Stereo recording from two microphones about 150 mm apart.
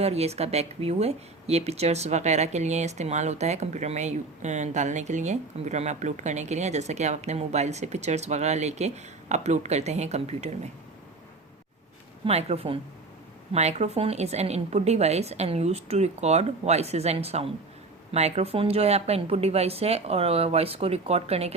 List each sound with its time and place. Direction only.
0.0 s speech: 45° right (ahead or behind)
12.2 s speech: 45° right (ahead or behind)